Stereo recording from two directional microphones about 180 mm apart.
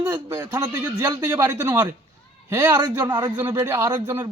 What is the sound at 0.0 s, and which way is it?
A man's voice, 15° right (ahead or behind).